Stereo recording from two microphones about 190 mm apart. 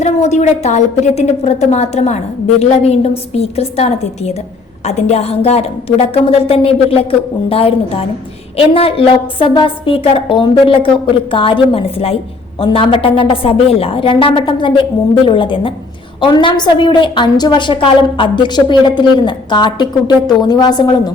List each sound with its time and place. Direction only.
0.0 s a woman's voice: 35° left (ahead or behind); by 21.1 s 20° left (ahead or behind)